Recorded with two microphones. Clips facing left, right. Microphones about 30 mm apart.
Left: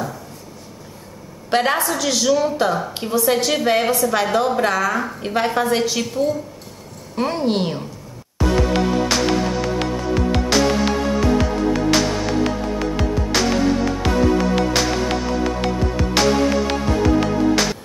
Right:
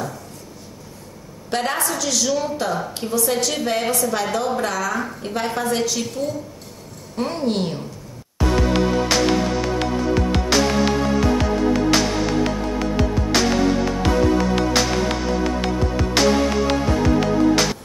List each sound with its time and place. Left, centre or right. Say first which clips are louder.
1.5 s a woman's voice: left 5 dB; left
1.8 s a woman's voice: left 2 dB; centre
2.5 s a woman's voice: left 4 dB; left
3.9 s a woman's voice: left 3 dB; centre
4.2 s a woman's voice: left 4 dB; centre
8.5 s music: even; centre